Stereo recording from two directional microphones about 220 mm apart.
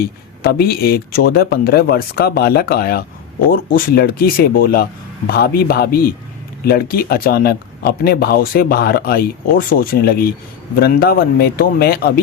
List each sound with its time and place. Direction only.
0.4 s speech: 45° left (ahead or behind)